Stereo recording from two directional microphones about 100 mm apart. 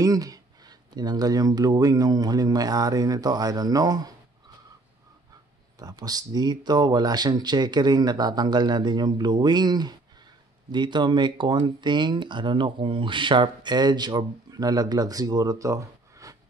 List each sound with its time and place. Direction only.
0.0 s speech: 35° right (ahead or behind)
5.8 s speech: 40° right (ahead or behind)